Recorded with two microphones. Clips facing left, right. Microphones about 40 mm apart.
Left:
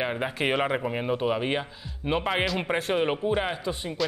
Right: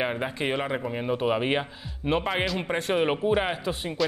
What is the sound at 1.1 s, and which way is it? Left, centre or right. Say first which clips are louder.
Speech: right 3 dB; centre.